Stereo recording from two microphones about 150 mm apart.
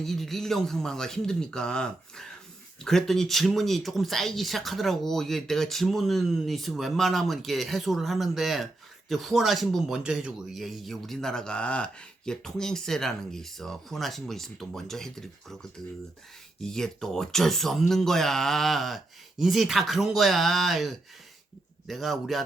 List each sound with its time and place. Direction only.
0.0 s speech: centre (ahead or behind)
16.6 s speech: 5° left (ahead or behind)